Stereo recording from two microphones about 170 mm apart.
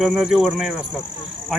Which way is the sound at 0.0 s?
5° right (ahead or behind).